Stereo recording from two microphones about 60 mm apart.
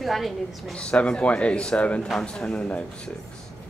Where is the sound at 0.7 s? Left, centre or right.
Centre.